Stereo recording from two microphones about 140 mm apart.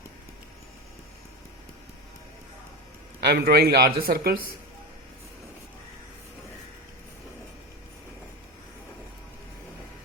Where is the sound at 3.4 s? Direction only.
90° right.